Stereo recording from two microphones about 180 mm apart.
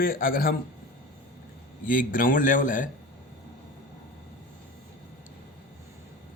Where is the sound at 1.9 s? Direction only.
50° left (ahead or behind).